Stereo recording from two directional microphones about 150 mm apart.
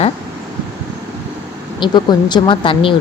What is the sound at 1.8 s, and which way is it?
Speech, 30° left (ahead or behind).